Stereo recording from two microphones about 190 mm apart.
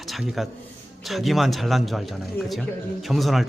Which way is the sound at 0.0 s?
Centre (ahead or behind).